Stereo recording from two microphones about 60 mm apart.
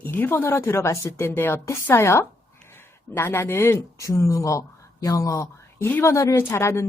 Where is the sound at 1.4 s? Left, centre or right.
Left.